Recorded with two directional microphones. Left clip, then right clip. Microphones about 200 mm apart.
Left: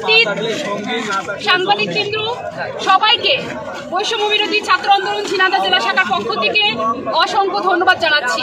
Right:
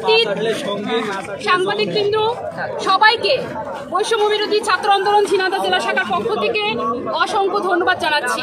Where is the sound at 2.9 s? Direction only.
20° right (ahead or behind).